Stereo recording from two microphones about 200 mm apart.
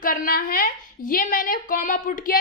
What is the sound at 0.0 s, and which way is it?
A woman's voice, 45° left (ahead or behind).